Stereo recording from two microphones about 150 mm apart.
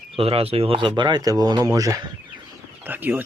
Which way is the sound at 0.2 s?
40° right (ahead or behind).